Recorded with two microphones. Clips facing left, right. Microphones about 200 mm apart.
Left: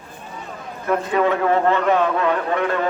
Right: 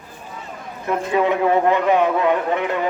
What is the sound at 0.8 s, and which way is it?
A man's voice, 20° right (ahead or behind).